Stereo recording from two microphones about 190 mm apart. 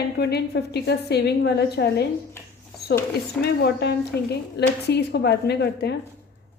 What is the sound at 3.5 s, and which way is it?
A woman's voice, 60° left (ahead or behind).